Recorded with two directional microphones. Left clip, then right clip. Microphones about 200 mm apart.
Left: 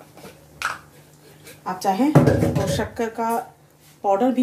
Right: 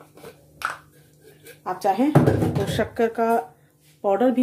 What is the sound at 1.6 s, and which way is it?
Speech, 45° right (ahead or behind).